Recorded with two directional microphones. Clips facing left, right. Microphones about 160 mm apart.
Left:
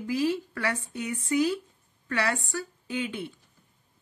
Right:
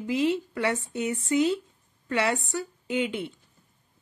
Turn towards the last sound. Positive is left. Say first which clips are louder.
# right 4 dB
turn(degrees=-25)  # may be behind; listen again after turning